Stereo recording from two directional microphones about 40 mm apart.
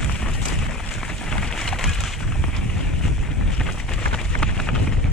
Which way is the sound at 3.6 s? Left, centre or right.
Centre.